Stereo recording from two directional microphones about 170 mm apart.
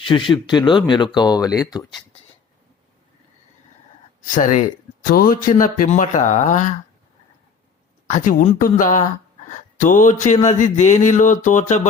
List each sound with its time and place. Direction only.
0.0 s speech: 30° left (ahead or behind)
4.2 s speech: 50° left (ahead or behind)
8.1 s speech: 50° left (ahead or behind)
9.5 s a sound: 50° left (ahead or behind)
10.4 s speech: 45° left (ahead or behind)